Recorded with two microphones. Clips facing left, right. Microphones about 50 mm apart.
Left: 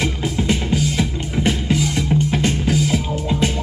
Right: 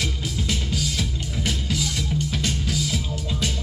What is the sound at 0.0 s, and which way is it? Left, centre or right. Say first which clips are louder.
Music: left 7 dB; left.